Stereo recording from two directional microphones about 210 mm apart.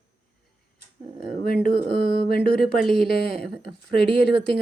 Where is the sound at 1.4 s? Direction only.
45° left (ahead or behind).